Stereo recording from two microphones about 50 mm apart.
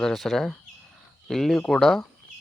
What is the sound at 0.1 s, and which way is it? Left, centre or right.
Speech, centre.